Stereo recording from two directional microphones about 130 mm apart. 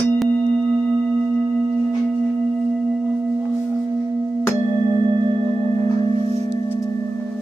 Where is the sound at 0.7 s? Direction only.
25° right (ahead or behind).